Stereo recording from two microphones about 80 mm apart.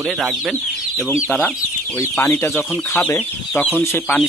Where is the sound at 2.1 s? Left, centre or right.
Left.